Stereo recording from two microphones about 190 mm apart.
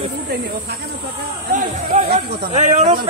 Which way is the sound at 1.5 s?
35° right (ahead or behind).